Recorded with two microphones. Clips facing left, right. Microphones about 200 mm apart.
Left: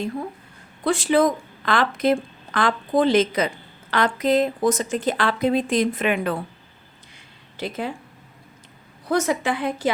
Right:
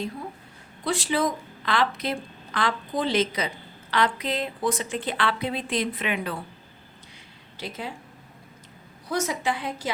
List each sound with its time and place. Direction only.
0.9 s a woman's voice: 50° left (ahead or behind)
7.5 s speech: 55° left (ahead or behind)
9.0 s a woman's voice: 55° left (ahead or behind)